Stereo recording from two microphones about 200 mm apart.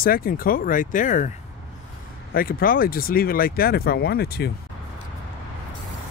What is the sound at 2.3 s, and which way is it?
Speech, 45° left (ahead or behind).